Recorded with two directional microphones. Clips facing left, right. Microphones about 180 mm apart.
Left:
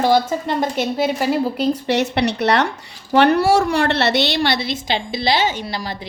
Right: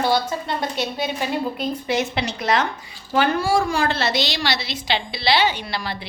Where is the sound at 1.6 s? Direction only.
75° left (ahead or behind).